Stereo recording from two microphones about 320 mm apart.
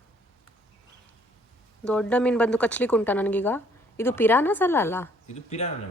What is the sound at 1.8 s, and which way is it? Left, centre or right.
A woman's voice, centre.